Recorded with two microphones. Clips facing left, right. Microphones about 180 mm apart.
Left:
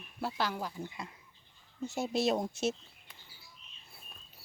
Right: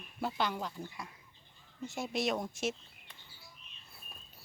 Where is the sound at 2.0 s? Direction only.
30° left (ahead or behind).